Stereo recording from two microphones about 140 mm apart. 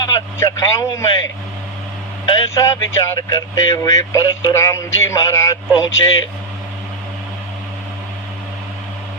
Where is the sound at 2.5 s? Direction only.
20° left (ahead or behind).